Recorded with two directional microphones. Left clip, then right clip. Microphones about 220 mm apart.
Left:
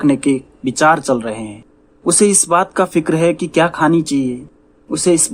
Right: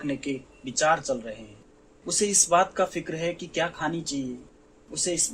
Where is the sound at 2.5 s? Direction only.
30° left (ahead or behind).